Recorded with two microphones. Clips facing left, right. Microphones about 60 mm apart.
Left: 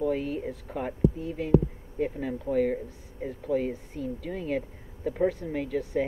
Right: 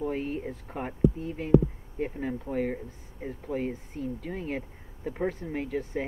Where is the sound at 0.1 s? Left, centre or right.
Centre.